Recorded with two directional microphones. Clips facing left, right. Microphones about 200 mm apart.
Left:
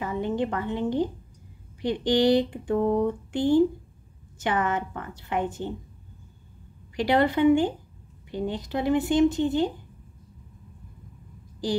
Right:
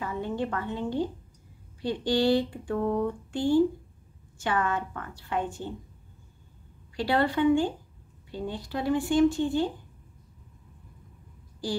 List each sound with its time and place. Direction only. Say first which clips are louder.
0.0 s a woman's voice: left 4 dB; 20° left (ahead or behind)
7.0 s speech: left 3 dB; 20° left (ahead or behind)